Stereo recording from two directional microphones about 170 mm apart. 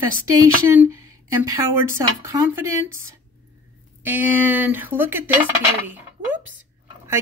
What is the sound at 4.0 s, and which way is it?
A woman's voice, 10° right (ahead or behind).